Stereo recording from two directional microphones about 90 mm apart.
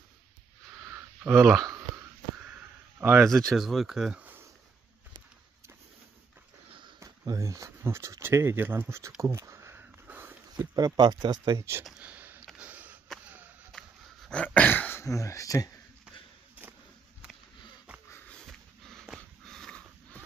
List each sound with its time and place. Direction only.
1.2 s speech: 20° right (ahead or behind)
3.0 s speech: 15° right (ahead or behind)
3.3 s speech: 5° left (ahead or behind)
4.2 s a sound: 20° right (ahead or behind)
7.0 s speech: 35° right (ahead or behind)
9.2 s a sound: 35° right (ahead or behind)
10.5 s speech: 50° right (ahead or behind)
11.5 s speech: 30° right (ahead or behind)
12.0 s a sound: 15° right (ahead or behind)
12.5 s sniff: 15° right (ahead or behind)
13.7 s throat clearing: 5° left (ahead or behind); by 15.0 s 25° left (ahead or behind)
15.0 s speech: 35° left (ahead or behind)
18.3 s sniff: 5° left (ahead or behind)
19.4 s a sound: 5° left (ahead or behind)